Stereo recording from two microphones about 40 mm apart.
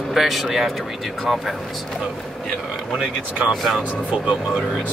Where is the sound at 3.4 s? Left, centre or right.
Centre.